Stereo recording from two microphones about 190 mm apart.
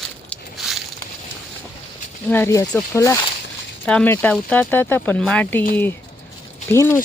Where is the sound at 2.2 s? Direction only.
10° left (ahead or behind).